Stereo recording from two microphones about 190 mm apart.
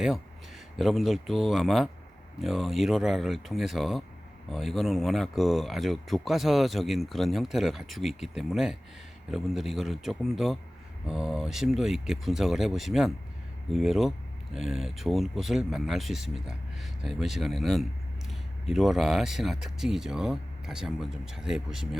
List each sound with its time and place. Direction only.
0.8 s speech: centre (ahead or behind)